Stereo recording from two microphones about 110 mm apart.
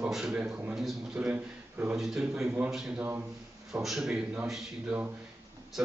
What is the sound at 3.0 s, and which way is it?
Speech, 20° right (ahead or behind).